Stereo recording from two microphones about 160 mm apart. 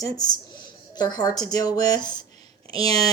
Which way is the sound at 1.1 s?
25° left (ahead or behind).